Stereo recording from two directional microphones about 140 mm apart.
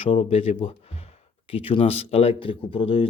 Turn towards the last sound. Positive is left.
turn(degrees=40)  # may be behind; listen again after turning